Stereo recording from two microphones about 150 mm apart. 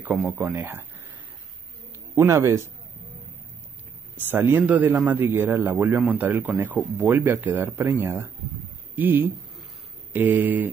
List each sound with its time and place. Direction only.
0.0 s a man's voice: 10° right (ahead or behind)
2.1 s speech: 20° right (ahead or behind)
4.3 s a man's voice: 10° right (ahead or behind)